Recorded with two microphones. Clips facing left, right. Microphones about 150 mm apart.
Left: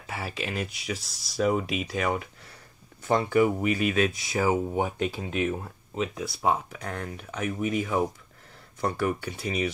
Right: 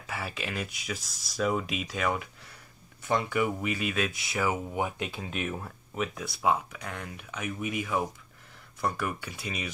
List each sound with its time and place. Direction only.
0.0 s speech: 35° left (ahead or behind)
1.5 s speech: 30° left (ahead or behind)